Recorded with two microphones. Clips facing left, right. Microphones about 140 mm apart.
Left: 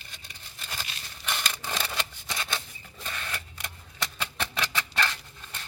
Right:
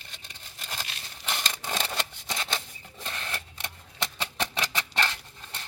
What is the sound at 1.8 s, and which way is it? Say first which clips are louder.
Scissors: right 1 dB; 40° right (ahead or behind).